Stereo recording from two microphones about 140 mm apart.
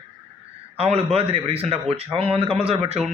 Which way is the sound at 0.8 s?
45° right (ahead or behind).